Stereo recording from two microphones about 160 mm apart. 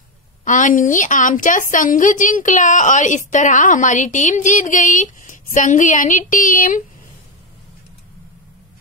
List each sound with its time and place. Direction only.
0.5 s a woman's voice: 55° left (ahead or behind)